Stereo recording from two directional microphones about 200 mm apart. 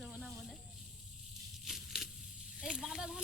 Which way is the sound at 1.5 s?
Centre (ahead or behind).